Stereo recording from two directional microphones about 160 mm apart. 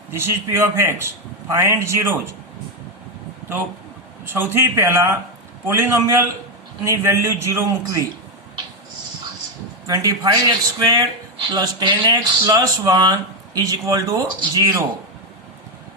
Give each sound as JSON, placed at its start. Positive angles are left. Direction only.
{"t": 0.1, "sound": "a man's voice", "side_deg": -15}
{"t": 4.3, "sound": "a man's voice", "side_deg": -15}
{"t": 9.8, "sound": "speech", "side_deg": -20}